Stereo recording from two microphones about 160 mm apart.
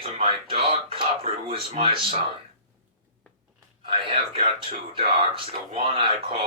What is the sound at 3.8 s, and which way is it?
Speech, 35° right (ahead or behind).